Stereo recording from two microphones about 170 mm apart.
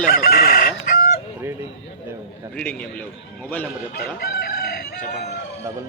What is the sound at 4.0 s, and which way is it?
Chicken, 70° left (ahead or behind).